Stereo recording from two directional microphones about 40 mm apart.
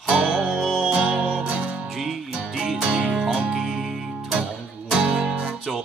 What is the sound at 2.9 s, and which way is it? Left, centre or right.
Music, right.